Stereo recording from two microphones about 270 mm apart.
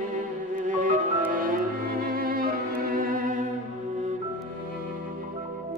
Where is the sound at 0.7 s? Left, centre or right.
Right.